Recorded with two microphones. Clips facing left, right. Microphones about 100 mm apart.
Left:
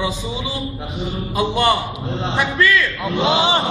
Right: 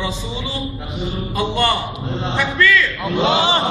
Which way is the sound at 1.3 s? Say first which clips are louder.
Left 2 dB; 15° left (ahead or behind).